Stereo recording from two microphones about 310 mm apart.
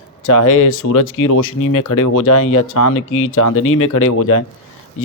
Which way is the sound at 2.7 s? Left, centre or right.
Left.